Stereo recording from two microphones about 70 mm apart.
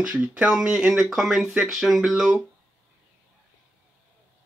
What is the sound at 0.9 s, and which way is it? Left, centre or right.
Speech, centre.